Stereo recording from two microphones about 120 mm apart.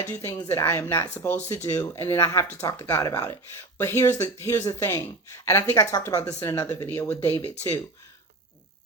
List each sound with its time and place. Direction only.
0.4 s speech: 20° left (ahead or behind)
7.4 s speech: 60° left (ahead or behind)